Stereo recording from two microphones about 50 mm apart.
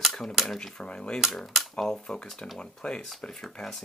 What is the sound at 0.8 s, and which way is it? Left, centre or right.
Speech, centre.